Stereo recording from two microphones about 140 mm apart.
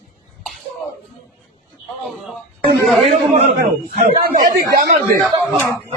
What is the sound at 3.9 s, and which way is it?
Speech, 90° right.